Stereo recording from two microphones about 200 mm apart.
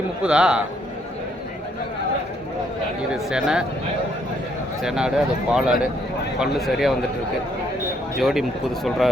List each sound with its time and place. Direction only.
0.2 s speech: 5° right (ahead or behind)
3.1 s speech: 5° right (ahead or behind)
4.8 s speech: 5° right (ahead or behind)
8.2 s speech: centre (ahead or behind)